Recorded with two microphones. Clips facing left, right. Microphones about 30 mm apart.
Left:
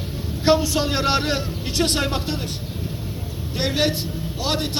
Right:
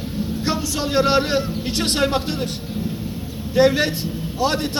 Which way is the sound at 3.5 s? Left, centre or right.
Left.